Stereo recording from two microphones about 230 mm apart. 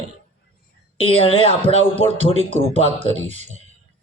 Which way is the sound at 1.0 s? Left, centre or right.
Left.